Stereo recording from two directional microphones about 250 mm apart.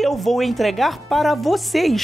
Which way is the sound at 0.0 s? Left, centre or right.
Centre.